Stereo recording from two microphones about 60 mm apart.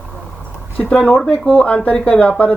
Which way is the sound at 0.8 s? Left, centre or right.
Centre.